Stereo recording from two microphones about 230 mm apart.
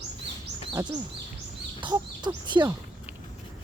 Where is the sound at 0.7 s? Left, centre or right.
Centre.